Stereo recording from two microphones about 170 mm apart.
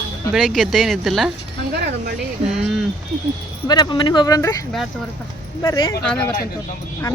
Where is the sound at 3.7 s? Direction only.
25° left (ahead or behind).